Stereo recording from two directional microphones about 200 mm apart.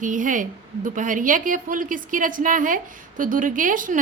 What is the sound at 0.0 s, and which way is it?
A woman's voice, 40° right (ahead or behind).